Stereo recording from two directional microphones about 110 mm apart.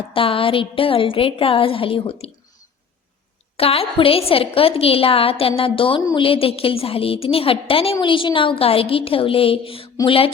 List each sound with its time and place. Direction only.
0.1 s a woman's voice: 55° left (ahead or behind)
3.6 s a woman's voice: 60° left (ahead or behind)